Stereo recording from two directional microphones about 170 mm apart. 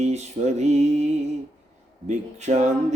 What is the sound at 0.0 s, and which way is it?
Mantra, 40° right (ahead or behind).